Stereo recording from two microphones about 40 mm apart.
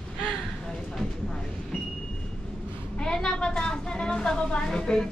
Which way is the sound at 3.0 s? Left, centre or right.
Centre.